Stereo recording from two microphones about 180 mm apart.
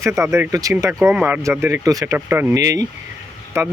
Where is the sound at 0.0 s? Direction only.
15° right (ahead or behind).